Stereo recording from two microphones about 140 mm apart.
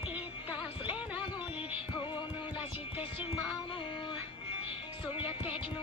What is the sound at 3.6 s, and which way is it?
Child singing, 35° left (ahead or behind).